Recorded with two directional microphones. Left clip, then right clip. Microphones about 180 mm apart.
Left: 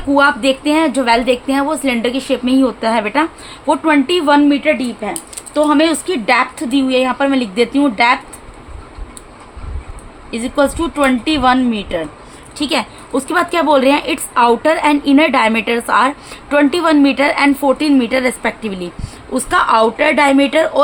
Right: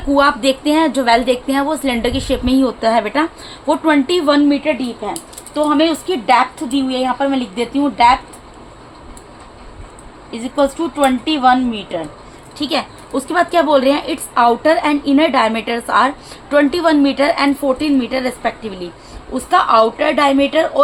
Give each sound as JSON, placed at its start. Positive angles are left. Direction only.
{"t": 0.1, "sound": "a woman's voice", "side_deg": 5}
{"t": 5.5, "sound": "a woman's voice", "side_deg": 45}
{"t": 10.3, "sound": "a woman's voice", "side_deg": 35}
{"t": 17.7, "sound": "a woman's voice", "side_deg": 35}